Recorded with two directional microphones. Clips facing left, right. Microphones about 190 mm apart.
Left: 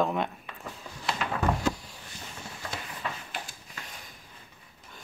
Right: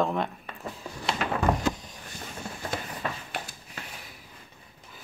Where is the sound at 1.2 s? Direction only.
50° right (ahead or behind).